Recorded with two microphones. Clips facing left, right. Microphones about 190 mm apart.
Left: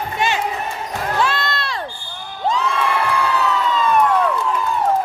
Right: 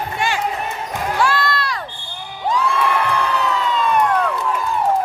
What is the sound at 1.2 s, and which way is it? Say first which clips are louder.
Crowd: right 5 dB; 20° left (ahead or behind).